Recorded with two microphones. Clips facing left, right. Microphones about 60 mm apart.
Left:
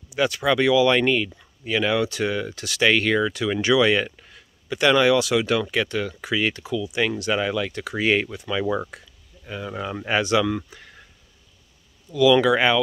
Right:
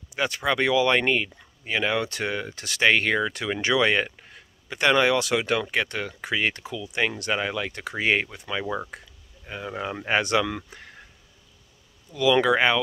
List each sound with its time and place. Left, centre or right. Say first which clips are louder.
0.1 s speech: left 4 dB; right
2.0 s speech: left 4 dB; right
10.2 s speech: left 3 dB; right
12.1 s speech: left 4 dB; right